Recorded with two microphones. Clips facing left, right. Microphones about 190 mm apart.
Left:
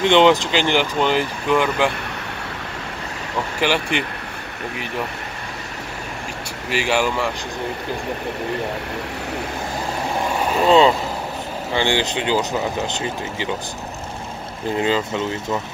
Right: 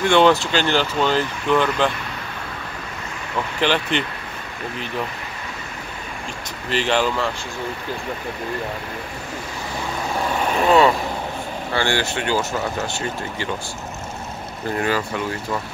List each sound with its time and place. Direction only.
0.0 s speech: 20° left (ahead or behind)
3.6 s speech: 10° left (ahead or behind)
6.7 s speech: 10° left (ahead or behind)
10.7 s speech: 20° left (ahead or behind)
14.8 s speech: 20° left (ahead or behind)